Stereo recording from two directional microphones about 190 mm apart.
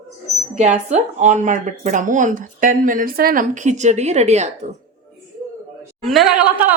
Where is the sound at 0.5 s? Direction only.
35° right (ahead or behind).